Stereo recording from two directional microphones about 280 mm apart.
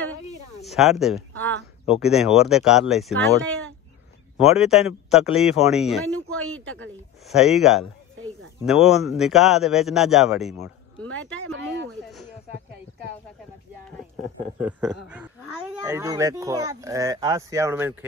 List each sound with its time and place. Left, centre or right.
0.7 s speech: centre
4.4 s speech: centre
7.2 s speech: centre
11.1 s speech: right
14.6 s speech: centre